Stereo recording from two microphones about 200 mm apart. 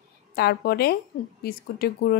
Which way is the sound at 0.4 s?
50° left (ahead or behind).